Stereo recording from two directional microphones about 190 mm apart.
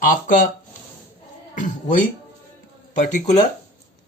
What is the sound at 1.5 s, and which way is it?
Music, 45° left (ahead or behind).